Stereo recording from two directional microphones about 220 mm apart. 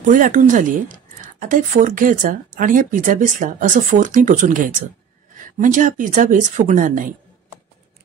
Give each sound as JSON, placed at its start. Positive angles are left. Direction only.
{"t": 0.0, "sound": "speech", "side_deg": -35}